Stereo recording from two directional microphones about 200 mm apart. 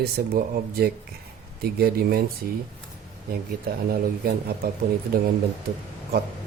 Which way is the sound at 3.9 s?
50° right (ahead or behind).